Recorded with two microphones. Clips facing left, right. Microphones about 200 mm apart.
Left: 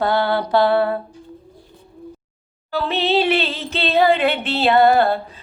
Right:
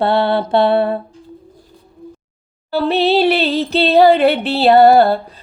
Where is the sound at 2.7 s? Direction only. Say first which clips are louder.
Right 5 dB; 35° right (ahead or behind).